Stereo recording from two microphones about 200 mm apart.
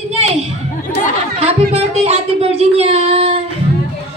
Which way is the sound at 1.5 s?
30° right (ahead or behind).